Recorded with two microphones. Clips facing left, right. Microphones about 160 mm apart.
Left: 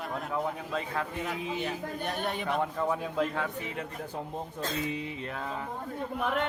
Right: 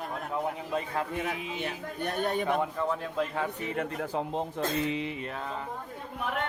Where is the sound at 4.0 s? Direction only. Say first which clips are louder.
Right 5 dB; 80° right.